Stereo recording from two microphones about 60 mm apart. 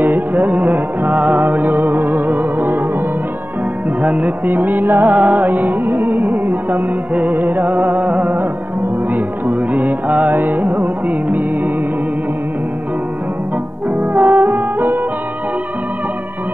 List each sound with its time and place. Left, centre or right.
0.0 s music: right
4.0 s music: right
13.9 s music: right